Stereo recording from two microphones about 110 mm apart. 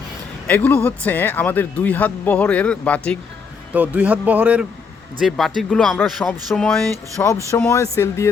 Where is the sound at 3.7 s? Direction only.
15° right (ahead or behind).